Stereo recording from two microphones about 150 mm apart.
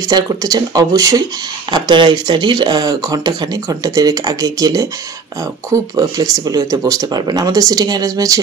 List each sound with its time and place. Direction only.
0.1 s speech: 25° right (ahead or behind)